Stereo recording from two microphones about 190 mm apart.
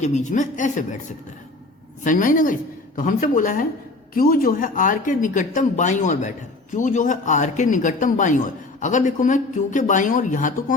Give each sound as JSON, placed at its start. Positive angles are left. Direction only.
{"t": 0.0, "sound": "speech", "side_deg": 40}
{"t": 2.0, "sound": "speech", "side_deg": 45}